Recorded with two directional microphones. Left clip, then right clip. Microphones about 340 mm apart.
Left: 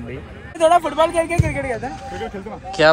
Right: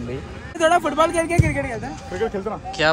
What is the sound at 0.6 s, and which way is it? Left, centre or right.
Speech, left.